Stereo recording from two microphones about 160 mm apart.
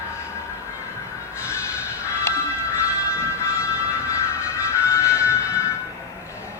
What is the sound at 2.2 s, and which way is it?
Music, 15° left (ahead or behind).